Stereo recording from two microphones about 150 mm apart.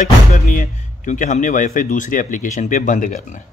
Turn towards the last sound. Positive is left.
turn(degrees=55)  # may be behind; listen again after turning